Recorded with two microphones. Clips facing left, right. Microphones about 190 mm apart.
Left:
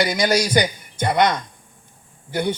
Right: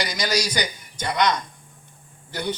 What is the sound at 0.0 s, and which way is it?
A man's voice, 55° left (ahead or behind).